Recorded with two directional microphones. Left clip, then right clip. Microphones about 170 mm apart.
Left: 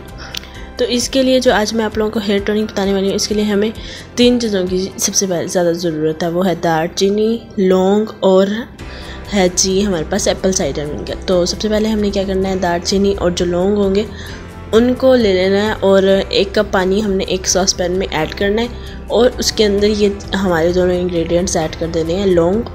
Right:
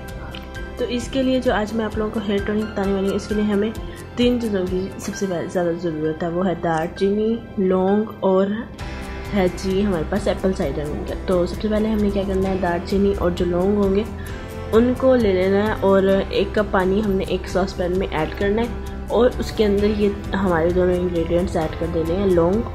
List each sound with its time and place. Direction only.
0.3 s a woman's voice: 40° left (ahead or behind)